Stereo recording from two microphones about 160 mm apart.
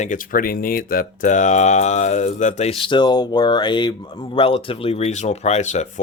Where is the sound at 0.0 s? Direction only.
55° left (ahead or behind).